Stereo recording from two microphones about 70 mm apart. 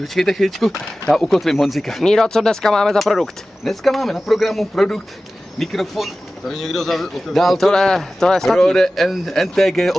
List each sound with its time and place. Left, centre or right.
0.0 s speech: centre